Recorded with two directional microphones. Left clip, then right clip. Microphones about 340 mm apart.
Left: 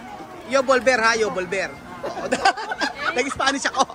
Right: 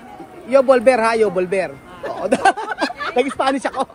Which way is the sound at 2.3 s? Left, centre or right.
Centre.